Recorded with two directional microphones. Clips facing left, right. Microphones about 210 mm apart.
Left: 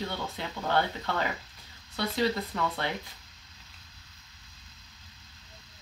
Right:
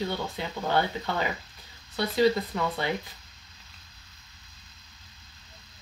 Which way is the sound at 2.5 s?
5° right (ahead or behind).